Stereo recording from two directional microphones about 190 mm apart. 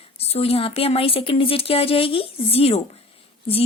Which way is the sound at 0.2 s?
30° left (ahead or behind).